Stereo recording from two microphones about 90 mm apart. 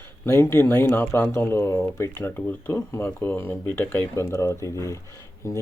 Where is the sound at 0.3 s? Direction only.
30° left (ahead or behind).